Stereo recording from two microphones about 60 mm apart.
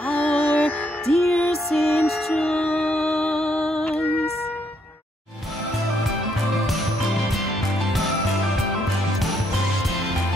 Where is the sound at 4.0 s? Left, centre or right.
Left.